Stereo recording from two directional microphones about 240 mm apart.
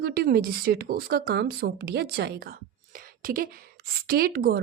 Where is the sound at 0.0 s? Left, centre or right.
Right.